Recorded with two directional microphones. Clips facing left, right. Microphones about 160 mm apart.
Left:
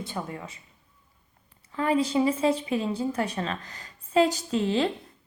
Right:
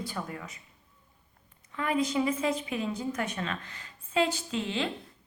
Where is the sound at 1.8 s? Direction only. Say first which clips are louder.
Left 4 dB; 30° left (ahead or behind).